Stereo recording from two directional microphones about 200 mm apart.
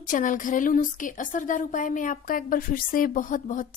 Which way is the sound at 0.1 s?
40° left (ahead or behind).